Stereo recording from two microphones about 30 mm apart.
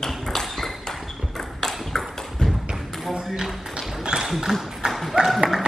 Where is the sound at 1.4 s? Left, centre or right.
Centre.